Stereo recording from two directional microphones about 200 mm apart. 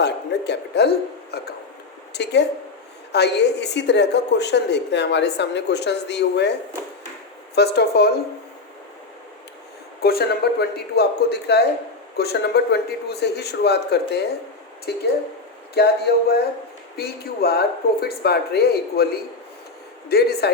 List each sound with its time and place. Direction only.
0.0 s a woman's voice: 55° left (ahead or behind)
7.5 s a woman's voice: 55° left (ahead or behind)
10.0 s a woman's voice: 50° left (ahead or behind)